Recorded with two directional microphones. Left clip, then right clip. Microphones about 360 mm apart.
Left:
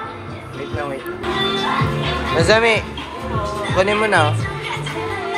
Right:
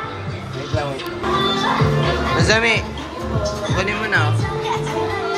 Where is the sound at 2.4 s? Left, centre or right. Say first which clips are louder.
Left 4 dB; centre.